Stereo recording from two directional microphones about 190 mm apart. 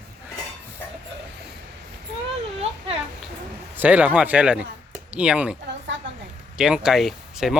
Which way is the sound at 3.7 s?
10° right (ahead or behind).